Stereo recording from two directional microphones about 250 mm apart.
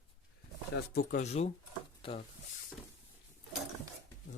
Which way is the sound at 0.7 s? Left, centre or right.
Left.